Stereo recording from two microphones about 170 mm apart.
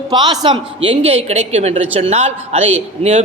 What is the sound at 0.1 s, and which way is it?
A woman's voice, 25° right (ahead or behind).